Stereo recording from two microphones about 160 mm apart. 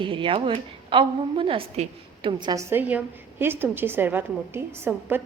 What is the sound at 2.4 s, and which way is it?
A woman's voice, 20° right (ahead or behind).